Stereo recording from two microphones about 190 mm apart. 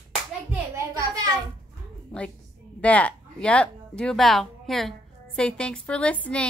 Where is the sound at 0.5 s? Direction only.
15° right (ahead or behind).